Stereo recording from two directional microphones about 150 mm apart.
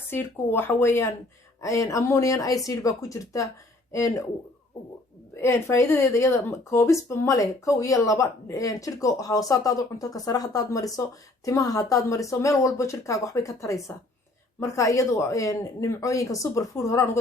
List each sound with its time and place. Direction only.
0.1 s speech: 15° left (ahead or behind)
5.4 s speech: 15° left (ahead or behind)